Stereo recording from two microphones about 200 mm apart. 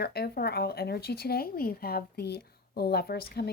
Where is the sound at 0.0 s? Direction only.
50° left (ahead or behind).